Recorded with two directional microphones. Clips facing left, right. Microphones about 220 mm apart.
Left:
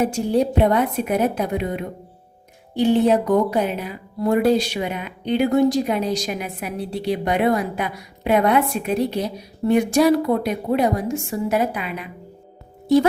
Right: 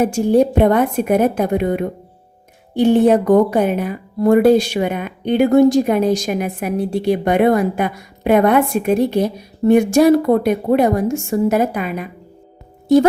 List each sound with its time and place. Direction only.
0.0 s speech: 50° right (ahead or behind)